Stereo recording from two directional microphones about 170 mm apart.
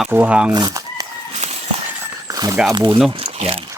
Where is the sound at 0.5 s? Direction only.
20° right (ahead or behind).